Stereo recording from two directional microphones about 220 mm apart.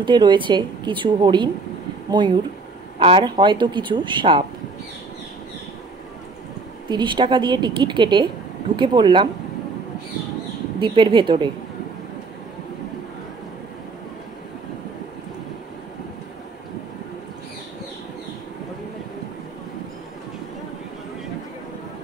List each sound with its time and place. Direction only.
0.0 s a woman's voice: 20° right (ahead or behind)
6.9 s a woman's voice: 20° right (ahead or behind)
10.8 s a woman's voice: 20° right (ahead or behind)